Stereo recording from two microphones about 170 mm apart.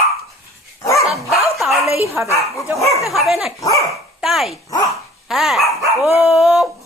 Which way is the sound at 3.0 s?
Centre (ahead or behind).